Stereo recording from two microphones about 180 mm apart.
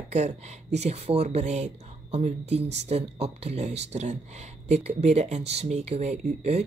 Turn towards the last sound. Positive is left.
turn(degrees=-35)  # may be behind; listen again after turning